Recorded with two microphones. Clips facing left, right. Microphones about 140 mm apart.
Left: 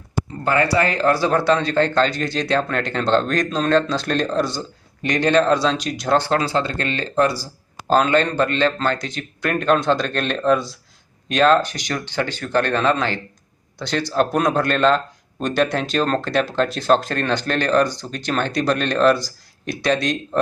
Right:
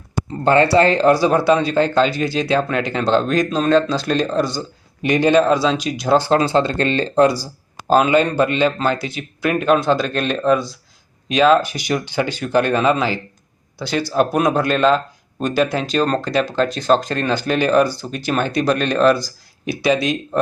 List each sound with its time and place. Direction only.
0.4 s speech: 25° right (ahead or behind); by 6.3 s 5° right (ahead or behind)
6.3 s speech: 25° right (ahead or behind); by 20.4 s 5° right (ahead or behind)